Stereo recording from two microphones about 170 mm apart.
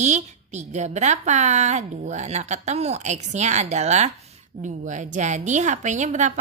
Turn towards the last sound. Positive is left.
turn(degrees=-45)  # may be behind; listen again after turning